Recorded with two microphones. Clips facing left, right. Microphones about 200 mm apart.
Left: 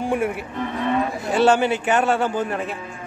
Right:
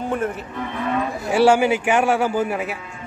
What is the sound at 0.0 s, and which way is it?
Speech, 10° left (ahead or behind).